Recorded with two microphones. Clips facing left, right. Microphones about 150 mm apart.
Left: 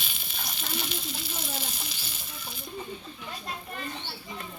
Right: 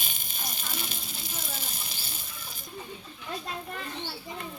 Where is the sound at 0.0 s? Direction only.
45° right (ahead or behind).